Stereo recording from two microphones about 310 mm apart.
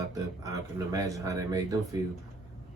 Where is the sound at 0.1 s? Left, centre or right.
Centre.